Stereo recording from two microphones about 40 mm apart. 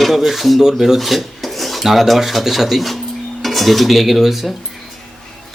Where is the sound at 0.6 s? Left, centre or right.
Centre.